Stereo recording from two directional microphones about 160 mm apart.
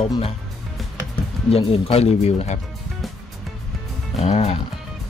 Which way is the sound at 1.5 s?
40° left (ahead or behind).